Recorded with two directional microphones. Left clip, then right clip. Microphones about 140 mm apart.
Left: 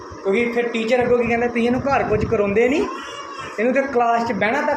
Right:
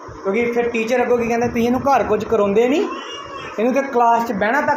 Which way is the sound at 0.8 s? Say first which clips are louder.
Left 3 dB; 50° right (ahead or behind).